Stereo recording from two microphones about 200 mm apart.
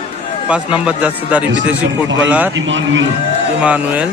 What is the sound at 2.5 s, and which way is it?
Speech, 70° right (ahead or behind).